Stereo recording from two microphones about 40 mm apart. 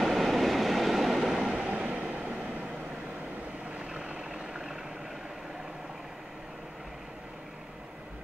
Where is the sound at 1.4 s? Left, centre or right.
Right.